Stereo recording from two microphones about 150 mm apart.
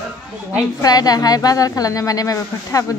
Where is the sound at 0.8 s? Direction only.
25° left (ahead or behind).